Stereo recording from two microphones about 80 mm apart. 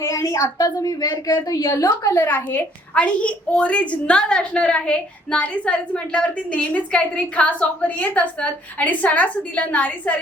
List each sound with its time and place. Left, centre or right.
0.0 s a woman's voice: left
1.3 s a woman's voice: left
1.9 s a child's voice: left